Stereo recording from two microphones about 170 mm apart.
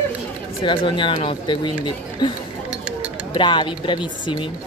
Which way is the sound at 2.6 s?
10° right (ahead or behind).